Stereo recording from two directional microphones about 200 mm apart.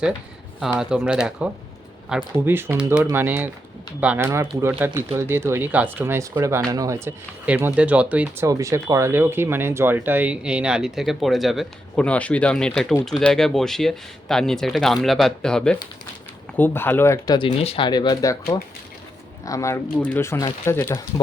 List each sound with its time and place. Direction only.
0.6 s speech: 5° right (ahead or behind); by 21.0 s 15° left (ahead or behind)